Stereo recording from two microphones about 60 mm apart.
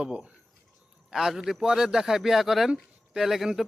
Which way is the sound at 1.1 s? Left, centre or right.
Centre.